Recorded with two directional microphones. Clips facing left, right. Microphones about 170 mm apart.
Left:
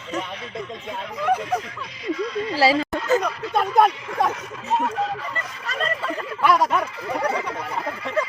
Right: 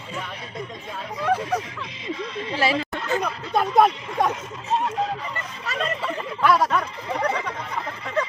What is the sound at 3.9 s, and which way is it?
Speech, 20° right (ahead or behind).